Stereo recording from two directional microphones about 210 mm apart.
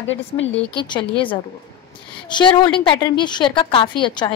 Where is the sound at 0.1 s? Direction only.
65° left (ahead or behind).